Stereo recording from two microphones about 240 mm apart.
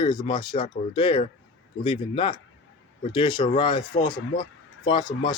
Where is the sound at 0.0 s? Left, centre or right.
Centre.